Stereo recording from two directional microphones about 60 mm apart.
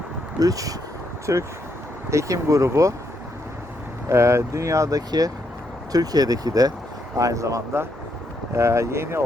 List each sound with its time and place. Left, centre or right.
0.3 s speech: right
1.3 s speech: right
4.1 s speech: right
7.2 s speech: right
8.5 s speech: right